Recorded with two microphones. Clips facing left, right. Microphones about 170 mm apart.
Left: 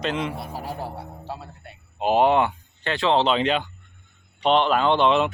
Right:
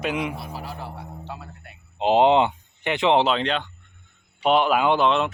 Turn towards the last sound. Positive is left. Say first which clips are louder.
# left 1 dB
turn(degrees=0)  # may be behind; listen again after turning